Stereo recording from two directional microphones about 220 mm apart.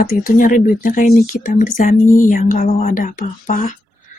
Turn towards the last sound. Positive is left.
turn(degrees=35)  # may be behind; listen again after turning